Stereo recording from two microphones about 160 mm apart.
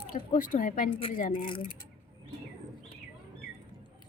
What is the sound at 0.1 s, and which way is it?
Speech, 60° left (ahead or behind).